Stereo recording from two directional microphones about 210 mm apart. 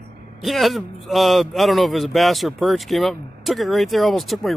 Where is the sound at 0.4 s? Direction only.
Centre (ahead or behind).